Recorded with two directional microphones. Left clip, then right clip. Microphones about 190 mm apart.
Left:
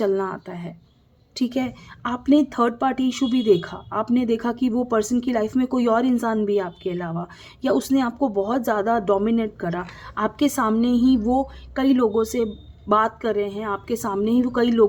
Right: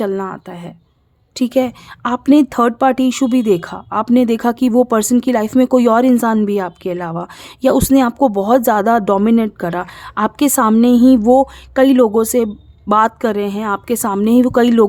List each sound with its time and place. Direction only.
0.0 s a woman's voice: 25° right (ahead or behind)